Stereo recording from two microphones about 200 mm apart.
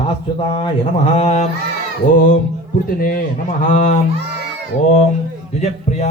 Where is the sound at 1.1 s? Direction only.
30° left (ahead or behind).